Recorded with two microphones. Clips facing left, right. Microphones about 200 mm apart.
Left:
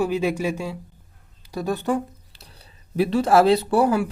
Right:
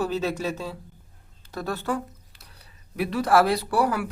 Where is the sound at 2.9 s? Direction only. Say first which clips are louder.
Left 4 dB; 30° left (ahead or behind).